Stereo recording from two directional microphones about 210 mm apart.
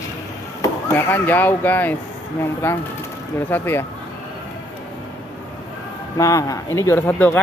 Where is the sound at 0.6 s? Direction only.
10° left (ahead or behind).